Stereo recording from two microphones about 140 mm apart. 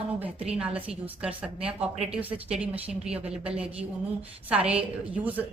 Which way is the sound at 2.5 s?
10° right (ahead or behind).